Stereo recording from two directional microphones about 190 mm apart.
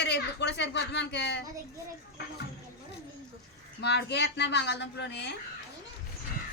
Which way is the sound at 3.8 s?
60° left (ahead or behind).